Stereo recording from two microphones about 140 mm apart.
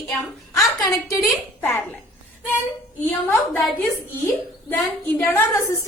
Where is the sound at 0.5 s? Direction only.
25° left (ahead or behind).